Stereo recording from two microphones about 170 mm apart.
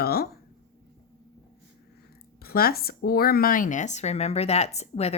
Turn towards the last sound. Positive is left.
turn(degrees=40)  # may be behind; listen again after turning